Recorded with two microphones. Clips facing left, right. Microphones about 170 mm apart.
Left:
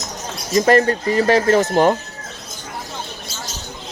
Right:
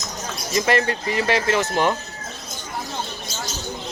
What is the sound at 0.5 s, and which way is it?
Speech, 40° left (ahead or behind).